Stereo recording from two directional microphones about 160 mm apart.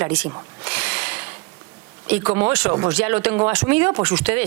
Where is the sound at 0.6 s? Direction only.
10° right (ahead or behind).